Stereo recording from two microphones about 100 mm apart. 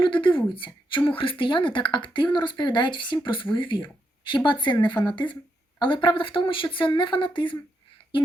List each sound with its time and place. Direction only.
0.0 s a woman's voice: 55° left (ahead or behind)